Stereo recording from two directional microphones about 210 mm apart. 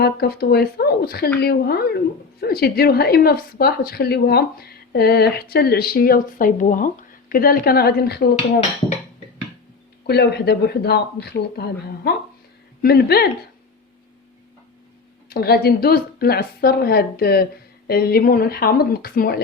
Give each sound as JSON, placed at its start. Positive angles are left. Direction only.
{"t": 0.0, "sound": "a woman's voice", "side_deg": 50}
{"t": 10.1, "sound": "a woman's voice", "side_deg": 50}
{"t": 15.3, "sound": "a woman's voice", "side_deg": 45}